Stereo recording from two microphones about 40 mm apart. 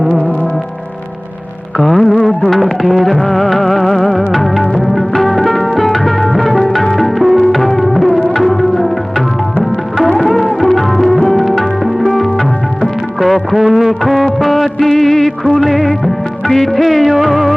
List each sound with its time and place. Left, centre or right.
0.1 s music: left
1.8 s music: centre
2.5 s music of bollywood: centre
3.2 s music: centre
8.4 s tabla: centre
10.2 s music: centre
13.7 s music of bollywood: centre
14.3 s music: centre
16.5 s music of bollywood: centre